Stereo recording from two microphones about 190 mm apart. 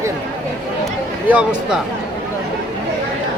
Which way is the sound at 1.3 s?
5° right (ahead or behind).